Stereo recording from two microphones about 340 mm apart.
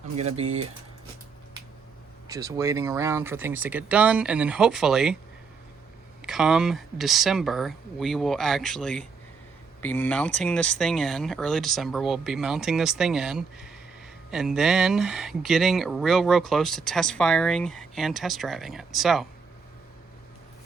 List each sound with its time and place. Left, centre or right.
0.2 s speech: centre
2.2 s speech: centre
6.2 s speech: centre